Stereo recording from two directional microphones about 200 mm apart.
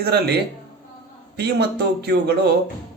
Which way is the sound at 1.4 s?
55° right (ahead or behind).